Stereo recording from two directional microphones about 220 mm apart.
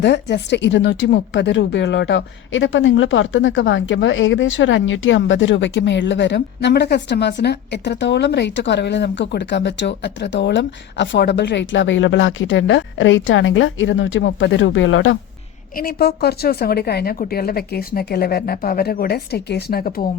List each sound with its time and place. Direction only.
0.0 s a woman's voice: 50° left (ahead or behind)
15.7 s a woman's voice: 40° left (ahead or behind)